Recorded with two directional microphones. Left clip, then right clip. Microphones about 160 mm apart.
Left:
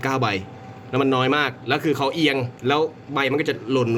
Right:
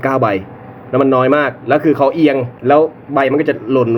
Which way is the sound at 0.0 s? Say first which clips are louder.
Right 9 dB; 20° left (ahead or behind).